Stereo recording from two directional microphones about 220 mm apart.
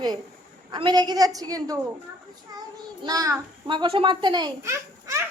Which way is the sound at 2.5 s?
15° right (ahead or behind).